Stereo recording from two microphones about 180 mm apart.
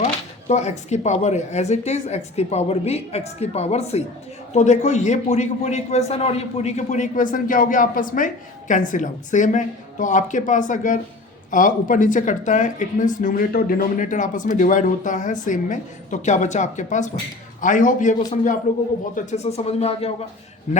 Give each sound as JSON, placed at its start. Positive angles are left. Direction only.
{"t": 0.0, "sound": "a man's voice", "side_deg": 40}